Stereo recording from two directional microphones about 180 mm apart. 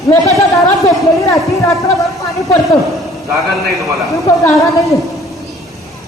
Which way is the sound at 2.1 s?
20° left (ahead or behind).